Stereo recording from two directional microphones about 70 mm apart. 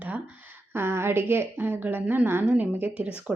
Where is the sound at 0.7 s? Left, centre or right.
Right.